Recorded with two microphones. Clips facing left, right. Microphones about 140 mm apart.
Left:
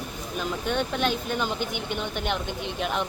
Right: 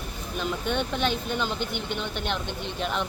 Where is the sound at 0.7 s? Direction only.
10° left (ahead or behind).